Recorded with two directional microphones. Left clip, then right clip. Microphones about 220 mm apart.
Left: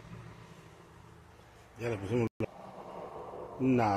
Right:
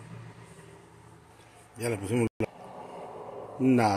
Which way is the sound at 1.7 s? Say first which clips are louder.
Right 4 dB; 40° right (ahead or behind).